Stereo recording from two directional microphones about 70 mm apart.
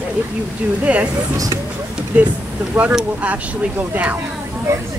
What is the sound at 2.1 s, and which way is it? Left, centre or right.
Speech, right.